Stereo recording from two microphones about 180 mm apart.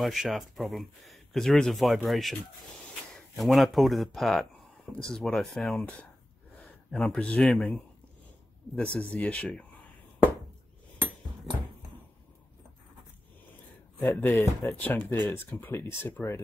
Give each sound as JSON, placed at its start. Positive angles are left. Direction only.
{"t": 0.0, "sound": "speech", "side_deg": 0}
{"t": 14.1, "sound": "speech", "side_deg": 15}